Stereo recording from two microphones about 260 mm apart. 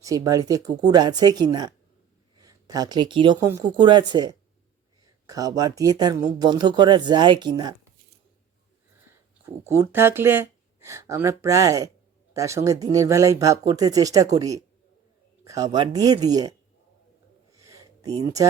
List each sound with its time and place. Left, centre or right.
0.0 s speech: centre
9.6 s speech: centre
17.6 s a sound: centre